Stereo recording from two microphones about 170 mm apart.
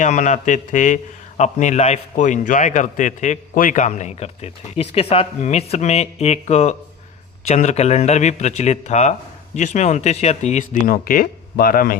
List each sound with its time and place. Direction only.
0.0 s a man's voice: 45° left (ahead or behind)